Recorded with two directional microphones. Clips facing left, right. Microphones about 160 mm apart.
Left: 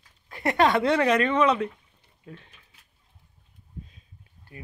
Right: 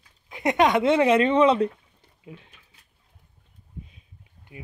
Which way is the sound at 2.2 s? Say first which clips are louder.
Right 1 dB; 10° right (ahead or behind).